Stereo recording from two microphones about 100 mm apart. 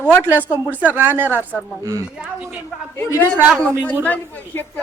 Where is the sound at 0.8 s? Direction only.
15° right (ahead or behind).